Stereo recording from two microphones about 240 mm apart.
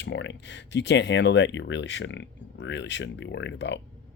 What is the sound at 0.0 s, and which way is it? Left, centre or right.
Speech, left.